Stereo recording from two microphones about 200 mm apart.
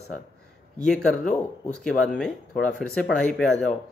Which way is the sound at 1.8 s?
5° left (ahead or behind).